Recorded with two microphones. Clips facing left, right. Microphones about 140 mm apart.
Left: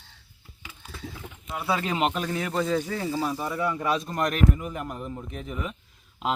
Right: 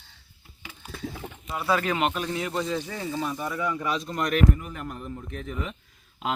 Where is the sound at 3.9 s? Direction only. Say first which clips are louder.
Even; 40° left (ahead or behind).